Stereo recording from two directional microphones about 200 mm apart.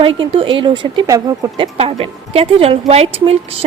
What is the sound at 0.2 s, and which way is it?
Speech, 25° right (ahead or behind).